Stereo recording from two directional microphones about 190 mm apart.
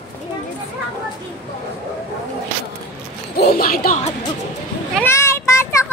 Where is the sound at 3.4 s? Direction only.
55° left (ahead or behind).